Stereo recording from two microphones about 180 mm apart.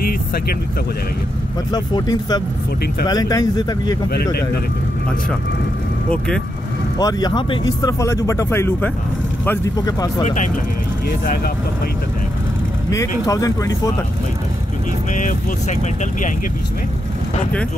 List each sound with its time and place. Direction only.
1.7 s speech: 20° left (ahead or behind)
4.1 s speech: 60° left (ahead or behind)
6.0 s speech: 5° left (ahead or behind)
7.0 s speech: 20° left (ahead or behind)
10.2 s speech: 45° left (ahead or behind)
12.9 s speech: 20° left (ahead or behind)
15.1 s speech: 45° left (ahead or behind)